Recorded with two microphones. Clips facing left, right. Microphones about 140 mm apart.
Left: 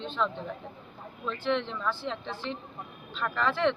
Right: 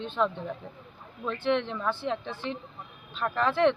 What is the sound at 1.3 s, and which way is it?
Speech, 60° right (ahead or behind).